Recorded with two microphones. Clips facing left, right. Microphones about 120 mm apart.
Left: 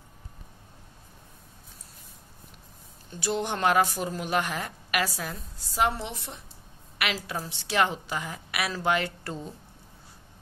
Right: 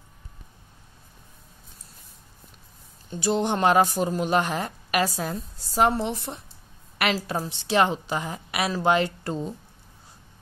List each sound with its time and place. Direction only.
3.1 s speech: 25° right (ahead or behind)